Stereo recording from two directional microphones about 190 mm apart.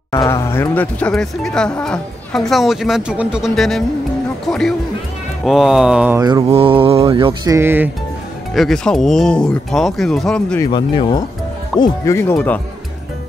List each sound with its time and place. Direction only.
0.1 s speech: 15° left (ahead or behind); by 6.1 s 5° right (ahead or behind)
6.1 s speech: 15° right (ahead or behind)
6.4 s mantra: 30° right (ahead or behind)
7.5 s speech: 10° right (ahead or behind)
8.5 s speech: centre (ahead or behind)
10.6 s speech: 25° left (ahead or behind)
11.8 s speech: 15° left (ahead or behind)